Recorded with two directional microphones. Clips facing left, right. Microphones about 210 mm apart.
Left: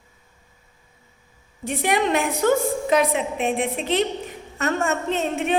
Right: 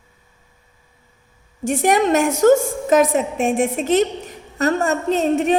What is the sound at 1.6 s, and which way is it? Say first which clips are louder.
A woman's voice: right 5 dB; 45° right (ahead or behind).